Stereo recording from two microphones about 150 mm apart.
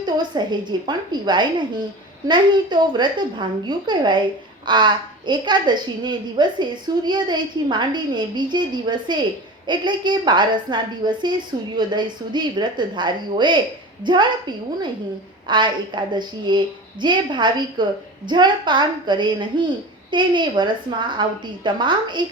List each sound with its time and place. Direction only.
0.0 s a woman's voice: 30° right (ahead or behind)